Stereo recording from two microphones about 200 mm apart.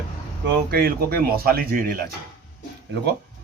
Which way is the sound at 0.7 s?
50° right (ahead or behind).